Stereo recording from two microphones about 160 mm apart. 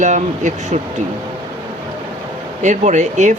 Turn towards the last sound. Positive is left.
turn(degrees=-50)  # may be behind; listen again after turning